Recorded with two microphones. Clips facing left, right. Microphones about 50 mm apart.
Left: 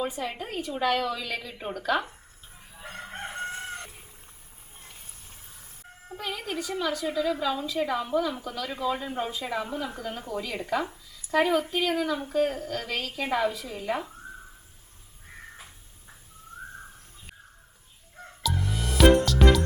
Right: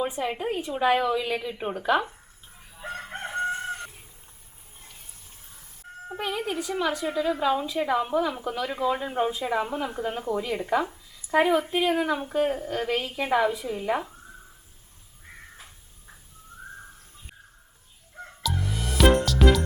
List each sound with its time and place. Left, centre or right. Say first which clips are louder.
0.0 s speech: right 4 dB; centre
2.9 s crowing: right 4 dB; centre
3.6 s chicken: right 4 dB; centre
6.1 s a woman's voice: right 4 dB; centre
18.2 s fowl: even; centre